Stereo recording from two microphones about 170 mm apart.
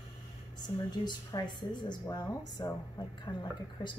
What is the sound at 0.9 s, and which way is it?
Speech, 25° left (ahead or behind).